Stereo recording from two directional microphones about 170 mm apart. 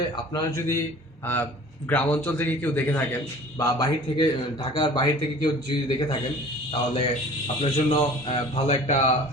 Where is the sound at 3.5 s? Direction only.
25° left (ahead or behind).